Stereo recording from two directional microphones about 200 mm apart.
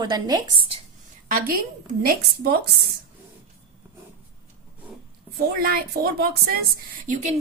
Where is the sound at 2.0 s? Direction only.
50° right (ahead or behind).